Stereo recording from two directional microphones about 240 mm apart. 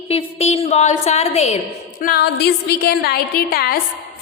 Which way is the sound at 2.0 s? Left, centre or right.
Left.